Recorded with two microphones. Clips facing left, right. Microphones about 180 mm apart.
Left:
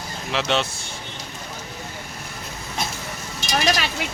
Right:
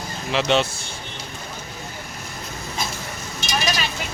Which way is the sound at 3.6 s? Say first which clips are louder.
Left 4 dB; 65° left (ahead or behind).